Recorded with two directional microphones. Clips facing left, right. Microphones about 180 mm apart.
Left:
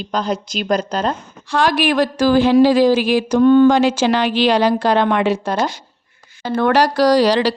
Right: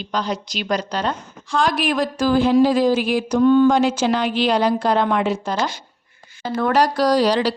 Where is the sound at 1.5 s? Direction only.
70° left (ahead or behind).